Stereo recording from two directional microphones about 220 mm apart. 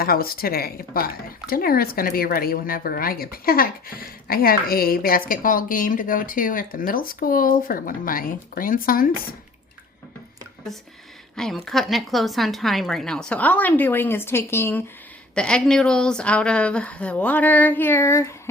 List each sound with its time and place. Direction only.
0.0 s speech: 45° left (ahead or behind)
11.3 s a woman's voice: centre (ahead or behind)